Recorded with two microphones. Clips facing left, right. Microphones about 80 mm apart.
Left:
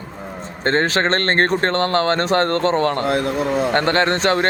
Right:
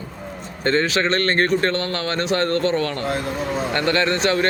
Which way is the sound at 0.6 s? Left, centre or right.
Left.